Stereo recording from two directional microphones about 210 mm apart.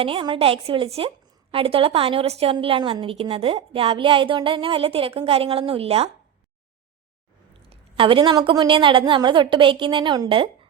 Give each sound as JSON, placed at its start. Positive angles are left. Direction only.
{"t": 0.0, "sound": "a woman's voice", "side_deg": -25}
{"t": 7.9, "sound": "a woman's voice", "side_deg": -25}